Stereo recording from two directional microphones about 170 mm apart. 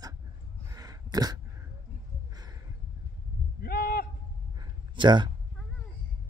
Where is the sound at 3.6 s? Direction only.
60° left (ahead or behind).